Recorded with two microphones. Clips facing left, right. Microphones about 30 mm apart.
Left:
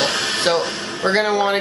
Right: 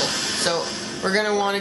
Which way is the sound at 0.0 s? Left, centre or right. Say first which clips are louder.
Left 5 dB; left.